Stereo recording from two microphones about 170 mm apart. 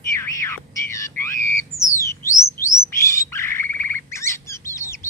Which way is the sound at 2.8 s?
15° left (ahead or behind).